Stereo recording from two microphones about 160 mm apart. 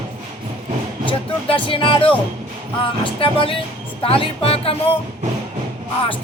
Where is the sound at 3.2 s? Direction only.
35° left (ahead or behind).